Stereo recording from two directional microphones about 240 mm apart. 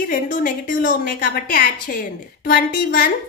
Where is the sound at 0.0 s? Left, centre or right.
Left.